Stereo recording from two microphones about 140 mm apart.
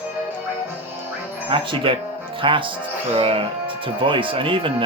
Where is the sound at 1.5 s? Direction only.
40° right (ahead or behind).